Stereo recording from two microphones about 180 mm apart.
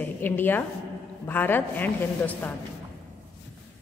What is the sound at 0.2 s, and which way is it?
A woman's voice, 10° left (ahead or behind).